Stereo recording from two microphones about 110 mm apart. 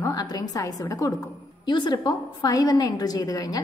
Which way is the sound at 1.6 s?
45° left (ahead or behind).